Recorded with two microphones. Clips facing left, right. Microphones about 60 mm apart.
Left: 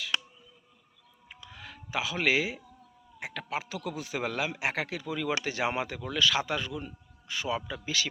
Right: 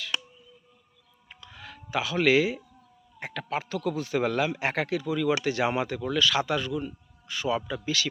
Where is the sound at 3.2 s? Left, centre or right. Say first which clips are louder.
Right 3 dB; centre.